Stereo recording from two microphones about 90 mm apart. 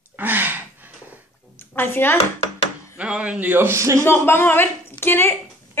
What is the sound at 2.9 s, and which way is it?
A man's voice, 15° right (ahead or behind).